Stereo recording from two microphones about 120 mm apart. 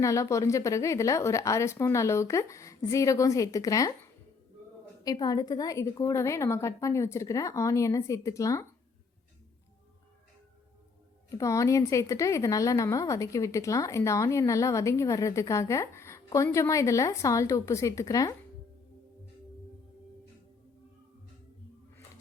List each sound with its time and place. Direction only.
0.0 s a woman's voice: 25° left (ahead or behind)
5.0 s a woman's voice: 30° left (ahead or behind)
11.3 s a woman's voice: 25° left (ahead or behind)